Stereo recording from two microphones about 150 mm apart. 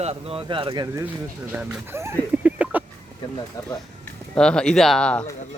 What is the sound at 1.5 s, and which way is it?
Speech, 15° right (ahead or behind).